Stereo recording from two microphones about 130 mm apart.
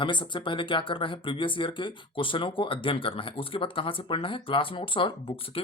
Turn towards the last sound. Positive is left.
turn(degrees=45)  # may be behind; listen again after turning